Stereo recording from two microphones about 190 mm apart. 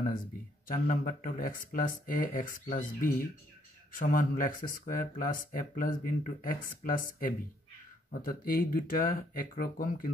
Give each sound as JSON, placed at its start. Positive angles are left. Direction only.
{"t": 0.7, "sound": "speech", "side_deg": 45}